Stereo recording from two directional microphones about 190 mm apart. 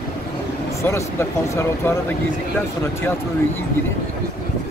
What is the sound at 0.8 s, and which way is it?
Speech, 15° left (ahead or behind).